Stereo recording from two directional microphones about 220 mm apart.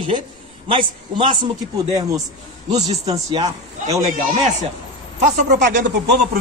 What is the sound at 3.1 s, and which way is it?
Speech, 15° right (ahead or behind).